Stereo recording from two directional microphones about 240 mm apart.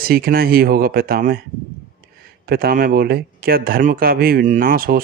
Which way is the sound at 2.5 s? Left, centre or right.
Right.